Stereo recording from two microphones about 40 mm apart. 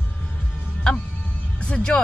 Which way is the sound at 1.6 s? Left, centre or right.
Left.